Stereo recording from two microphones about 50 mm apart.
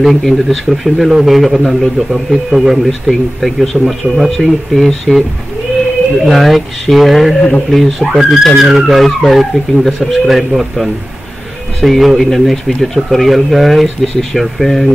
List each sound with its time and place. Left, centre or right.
0.0 s speech: centre
6.2 s speech: centre